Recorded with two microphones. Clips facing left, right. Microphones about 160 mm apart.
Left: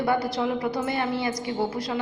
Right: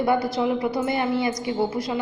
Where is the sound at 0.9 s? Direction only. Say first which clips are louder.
Right 3 dB; 15° right (ahead or behind).